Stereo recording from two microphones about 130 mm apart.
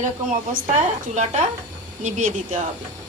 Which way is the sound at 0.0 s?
70° right (ahead or behind).